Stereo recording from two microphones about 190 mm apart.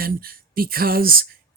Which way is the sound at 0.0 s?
50° right (ahead or behind).